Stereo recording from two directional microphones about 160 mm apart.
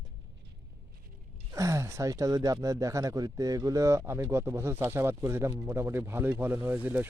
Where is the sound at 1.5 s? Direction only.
20° right (ahead or behind).